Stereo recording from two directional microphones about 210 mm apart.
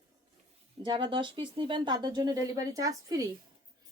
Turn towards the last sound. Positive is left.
turn(degrees=-15)  # may be behind; listen again after turning